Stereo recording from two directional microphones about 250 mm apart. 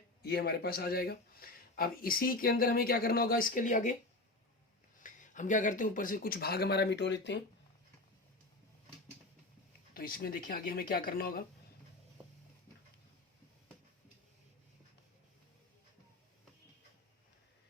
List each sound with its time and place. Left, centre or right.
0.2 s speech: left
4.9 s speech: left
9.9 s speech: left